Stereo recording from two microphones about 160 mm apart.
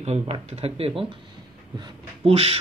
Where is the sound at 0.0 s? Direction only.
40° right (ahead or behind).